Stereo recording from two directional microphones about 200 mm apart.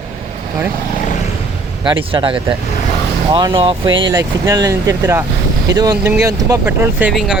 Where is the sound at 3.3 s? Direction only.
25° right (ahead or behind).